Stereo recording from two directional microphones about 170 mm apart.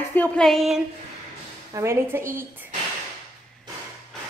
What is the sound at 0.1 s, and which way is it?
Speech, 5° left (ahead or behind).